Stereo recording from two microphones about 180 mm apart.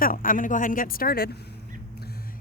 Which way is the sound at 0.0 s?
50° left (ahead or behind).